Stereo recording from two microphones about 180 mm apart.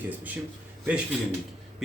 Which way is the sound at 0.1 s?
10° right (ahead or behind).